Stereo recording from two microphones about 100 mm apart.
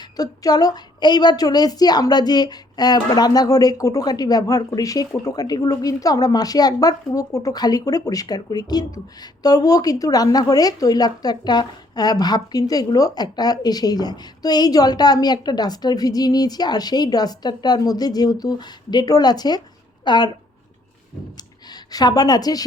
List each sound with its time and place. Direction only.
0.2 s a woman's voice: 40° left (ahead or behind)
21.7 s a woman's voice: 40° left (ahead or behind)